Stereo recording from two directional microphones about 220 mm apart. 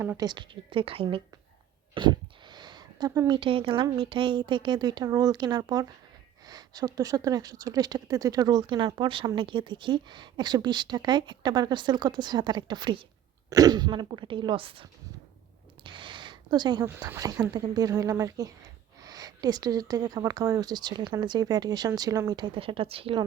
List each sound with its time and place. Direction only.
0.0 s speech: 15° right (ahead or behind)
19.0 s a sound: 15° right (ahead or behind)
19.9 s speech: 15° right (ahead or behind)